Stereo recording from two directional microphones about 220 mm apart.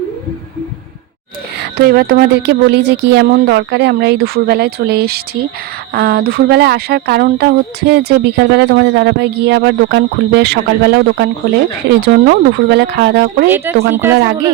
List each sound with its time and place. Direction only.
1.8 s speech: 45° right (ahead or behind)
13.9 s speech: 10° right (ahead or behind)